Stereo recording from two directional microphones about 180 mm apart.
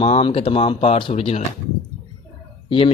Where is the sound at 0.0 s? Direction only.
30° left (ahead or behind).